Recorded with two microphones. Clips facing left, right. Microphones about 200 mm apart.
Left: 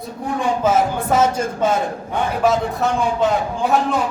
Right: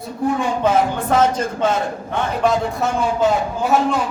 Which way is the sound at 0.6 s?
5° left (ahead or behind).